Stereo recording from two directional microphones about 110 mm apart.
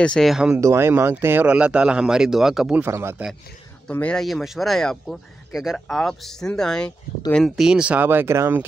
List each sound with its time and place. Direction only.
0.0 s speech: 10° left (ahead or behind)
0.3 s speech: 10° right (ahead or behind)
0.6 s speech: 25° right (ahead or behind); by 2.8 s 5° right (ahead or behind)
2.8 s speech: 20° right (ahead or behind)
4.0 s speech: 5° left (ahead or behind); by 8.6 s 20° right (ahead or behind)